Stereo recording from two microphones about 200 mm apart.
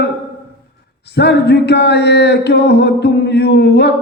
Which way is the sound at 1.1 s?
55° left (ahead or behind).